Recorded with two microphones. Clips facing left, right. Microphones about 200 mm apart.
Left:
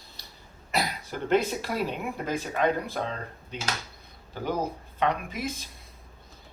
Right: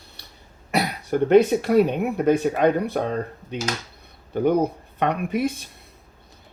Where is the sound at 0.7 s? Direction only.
60° right (ahead or behind).